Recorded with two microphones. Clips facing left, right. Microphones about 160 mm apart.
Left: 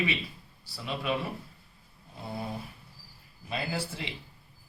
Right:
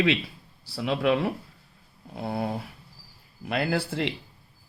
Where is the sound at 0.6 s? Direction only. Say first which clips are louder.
Right 9 dB; 85° right.